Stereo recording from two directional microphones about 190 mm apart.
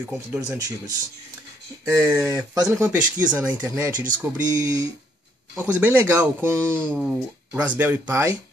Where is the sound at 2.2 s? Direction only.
5° right (ahead or behind).